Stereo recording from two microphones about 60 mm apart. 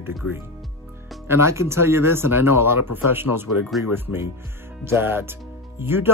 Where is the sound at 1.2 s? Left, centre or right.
Right.